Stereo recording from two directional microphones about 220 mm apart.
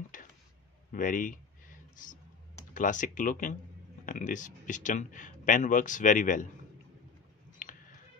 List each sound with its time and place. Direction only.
0.9 s speech: 40° left (ahead or behind)
2.7 s speech: 35° left (ahead or behind)
7.6 s a sound: 40° left (ahead or behind)